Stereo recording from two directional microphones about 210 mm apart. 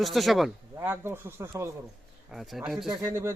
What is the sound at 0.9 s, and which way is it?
Speech, 10° right (ahead or behind).